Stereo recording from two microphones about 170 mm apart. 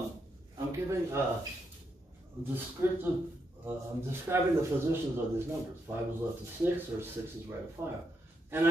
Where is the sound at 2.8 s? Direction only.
15° right (ahead or behind).